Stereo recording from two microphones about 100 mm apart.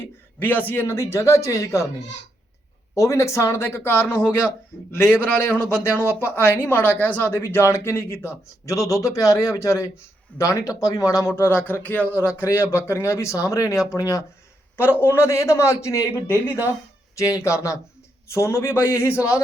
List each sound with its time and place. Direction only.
0.3 s speech: 20° left (ahead or behind)
2.9 s a man's voice: 30° left (ahead or behind)
11.3 s speech: 20° left (ahead or behind)
14.8 s a man's voice: 20° left (ahead or behind)